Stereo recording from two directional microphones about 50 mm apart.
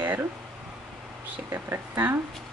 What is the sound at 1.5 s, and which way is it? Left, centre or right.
Speech, right.